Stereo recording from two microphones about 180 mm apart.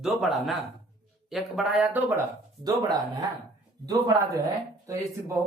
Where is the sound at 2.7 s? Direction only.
20° right (ahead or behind).